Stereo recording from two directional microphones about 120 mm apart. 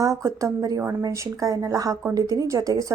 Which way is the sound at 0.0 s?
25° right (ahead or behind).